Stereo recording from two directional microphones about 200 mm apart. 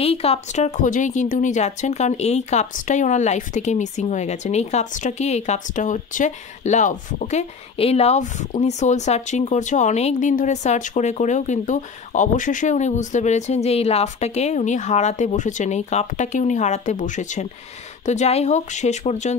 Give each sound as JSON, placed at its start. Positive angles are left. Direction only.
{"t": 0.0, "sound": "a woman's voice", "side_deg": 30}